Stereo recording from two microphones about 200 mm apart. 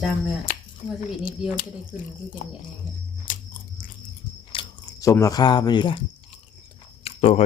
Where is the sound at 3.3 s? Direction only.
40° left (ahead or behind).